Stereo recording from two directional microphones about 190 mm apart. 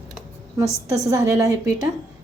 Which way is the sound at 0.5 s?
15° right (ahead or behind).